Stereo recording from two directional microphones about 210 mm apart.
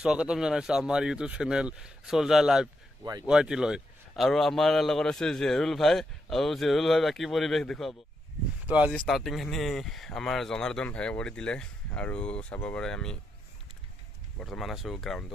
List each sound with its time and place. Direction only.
0.0 s a man's voice: 5° right (ahead or behind)
3.0 s speech: 15° right (ahead or behind)
3.3 s a man's voice: 5° right (ahead or behind)
14.4 s a man's voice: centre (ahead or behind)